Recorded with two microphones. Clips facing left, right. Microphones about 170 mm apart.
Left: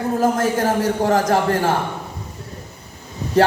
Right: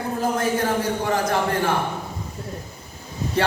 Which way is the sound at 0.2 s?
40° left (ahead or behind).